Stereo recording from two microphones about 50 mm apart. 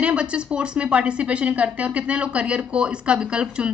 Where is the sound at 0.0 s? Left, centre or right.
Right.